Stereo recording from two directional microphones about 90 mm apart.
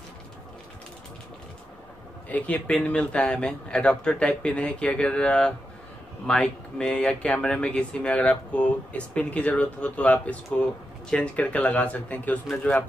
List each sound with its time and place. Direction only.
2.2 s speech: 15° left (ahead or behind)